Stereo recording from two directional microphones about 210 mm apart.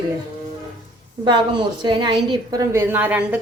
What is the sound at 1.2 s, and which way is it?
A woman's voice, 20° right (ahead or behind).